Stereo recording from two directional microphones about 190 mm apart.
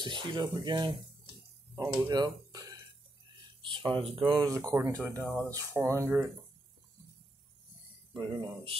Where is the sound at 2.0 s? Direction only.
20° right (ahead or behind).